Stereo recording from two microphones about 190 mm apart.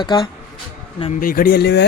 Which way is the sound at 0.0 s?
25° left (ahead or behind).